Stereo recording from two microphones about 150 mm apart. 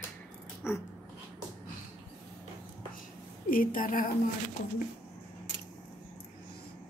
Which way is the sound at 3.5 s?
70° left (ahead or behind).